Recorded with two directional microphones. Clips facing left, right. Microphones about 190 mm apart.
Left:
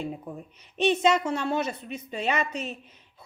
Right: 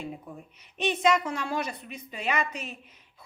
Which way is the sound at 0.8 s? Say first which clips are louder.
Left 3 dB; 30° left (ahead or behind).